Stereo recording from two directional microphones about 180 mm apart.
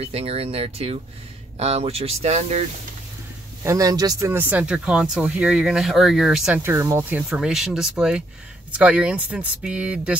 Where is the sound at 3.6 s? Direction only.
20° right (ahead or behind).